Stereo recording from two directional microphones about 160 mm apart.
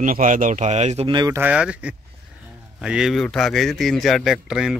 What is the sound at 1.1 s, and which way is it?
Speech, 25° right (ahead or behind).